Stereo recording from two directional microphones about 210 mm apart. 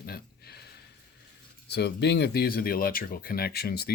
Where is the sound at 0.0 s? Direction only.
50° left (ahead or behind).